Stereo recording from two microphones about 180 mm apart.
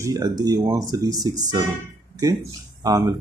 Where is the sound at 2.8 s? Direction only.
20° right (ahead or behind).